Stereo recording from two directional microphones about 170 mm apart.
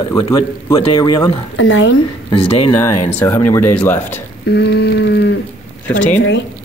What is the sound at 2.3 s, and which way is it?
Speech, 35° left (ahead or behind).